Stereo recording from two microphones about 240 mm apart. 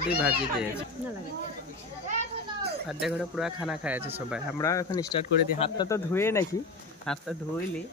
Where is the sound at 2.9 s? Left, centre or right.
Centre.